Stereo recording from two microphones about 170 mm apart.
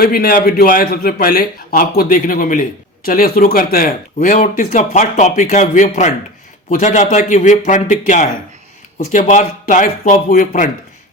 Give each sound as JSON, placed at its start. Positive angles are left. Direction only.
{"t": 0.0, "sound": "a man's voice", "side_deg": 60}